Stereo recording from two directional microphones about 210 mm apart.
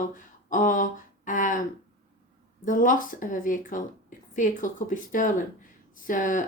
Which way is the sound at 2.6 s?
40° left (ahead or behind).